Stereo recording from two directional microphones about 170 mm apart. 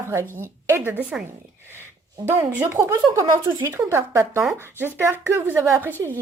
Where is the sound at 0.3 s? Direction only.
15° right (ahead or behind).